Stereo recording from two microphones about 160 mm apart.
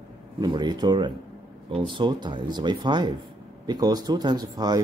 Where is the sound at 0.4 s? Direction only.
25° right (ahead or behind).